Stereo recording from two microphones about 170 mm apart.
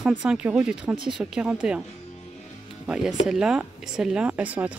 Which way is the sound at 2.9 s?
5° right (ahead or behind).